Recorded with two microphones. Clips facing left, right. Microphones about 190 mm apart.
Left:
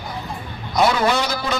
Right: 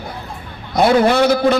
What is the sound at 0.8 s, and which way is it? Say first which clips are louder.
Speech: right 6 dB; 60° right (ahead or behind).